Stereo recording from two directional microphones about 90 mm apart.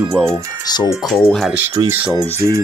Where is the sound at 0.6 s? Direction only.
50° left (ahead or behind).